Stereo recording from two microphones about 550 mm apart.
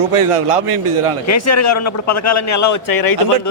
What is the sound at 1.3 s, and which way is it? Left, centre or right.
A man's voice, left.